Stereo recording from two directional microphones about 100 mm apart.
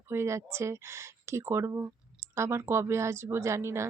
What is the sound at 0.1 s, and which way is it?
A woman's voice, 25° right (ahead or behind).